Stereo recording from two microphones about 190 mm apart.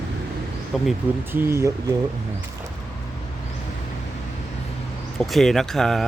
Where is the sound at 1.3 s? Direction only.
15° right (ahead or behind).